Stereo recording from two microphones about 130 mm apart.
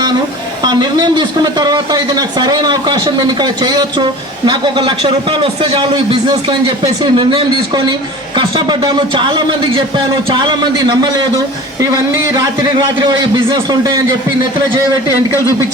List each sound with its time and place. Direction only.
0.6 s speech: 30° right (ahead or behind)